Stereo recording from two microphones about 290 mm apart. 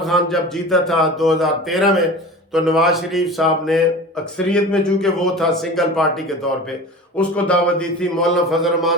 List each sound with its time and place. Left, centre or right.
0.0 s a man's voice: centre